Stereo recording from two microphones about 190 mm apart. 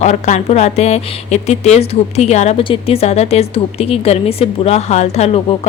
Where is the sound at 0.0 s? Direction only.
35° left (ahead or behind).